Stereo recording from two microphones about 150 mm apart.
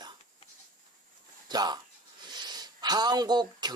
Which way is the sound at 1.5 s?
25° right (ahead or behind).